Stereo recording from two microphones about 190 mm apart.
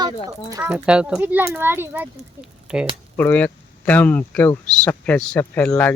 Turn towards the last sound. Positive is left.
turn(degrees=10)  # may be behind; listen again after turning